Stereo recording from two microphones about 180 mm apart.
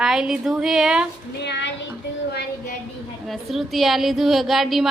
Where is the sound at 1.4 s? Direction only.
75° left (ahead or behind).